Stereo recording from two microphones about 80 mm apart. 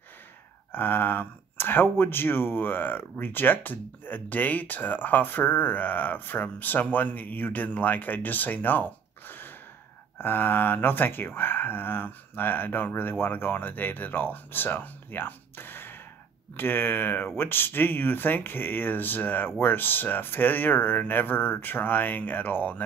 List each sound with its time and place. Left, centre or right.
0.7 s speech: left